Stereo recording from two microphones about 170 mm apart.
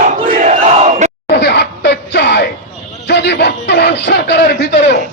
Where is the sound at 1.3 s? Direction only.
75° left (ahead or behind).